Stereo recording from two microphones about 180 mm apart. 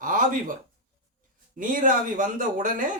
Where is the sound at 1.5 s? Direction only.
50° right (ahead or behind).